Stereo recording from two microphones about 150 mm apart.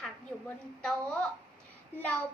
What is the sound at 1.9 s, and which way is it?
Speech, 10° left (ahead or behind).